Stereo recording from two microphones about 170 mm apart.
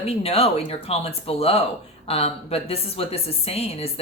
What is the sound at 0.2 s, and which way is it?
Speech, 35° left (ahead or behind).